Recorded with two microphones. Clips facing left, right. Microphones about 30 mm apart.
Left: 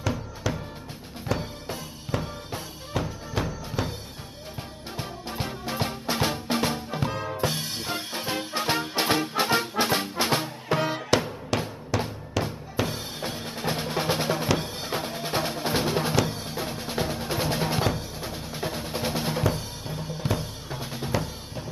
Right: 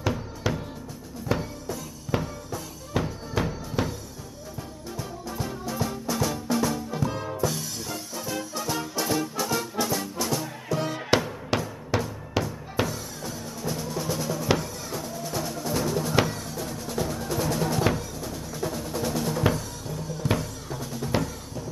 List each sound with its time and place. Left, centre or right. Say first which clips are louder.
0.5 s music: right 2 dB; centre
1.4 s music: right 1 dB; left
2.9 s music: right 2 dB; centre
3.8 s music: right 2 dB; centre
4.9 s music: left 1 dB; left
7.1 s music: left 1 dB; left
7.3 s music: even; left
11.1 s music: right 2 dB; centre
12.8 s music: left 1 dB; left
17.9 s drum: right 1 dB; left
20.3 s music: right 2 dB; left